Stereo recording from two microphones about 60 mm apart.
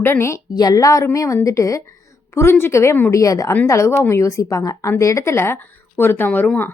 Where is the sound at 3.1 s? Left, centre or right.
Left.